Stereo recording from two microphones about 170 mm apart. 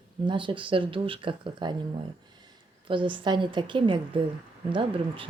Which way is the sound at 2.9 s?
30° right (ahead or behind).